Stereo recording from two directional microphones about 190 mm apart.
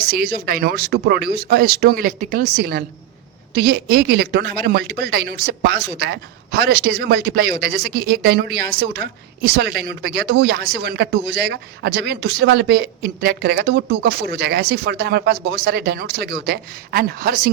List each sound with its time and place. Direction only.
0.1 s speech: 50° right (ahead or behind)